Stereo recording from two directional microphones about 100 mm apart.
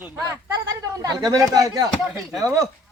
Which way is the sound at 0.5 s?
40° right (ahead or behind).